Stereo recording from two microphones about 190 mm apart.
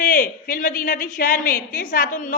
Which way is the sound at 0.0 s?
45° left (ahead or behind).